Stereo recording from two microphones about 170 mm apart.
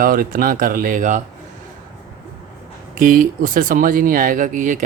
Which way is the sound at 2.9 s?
55° right (ahead or behind).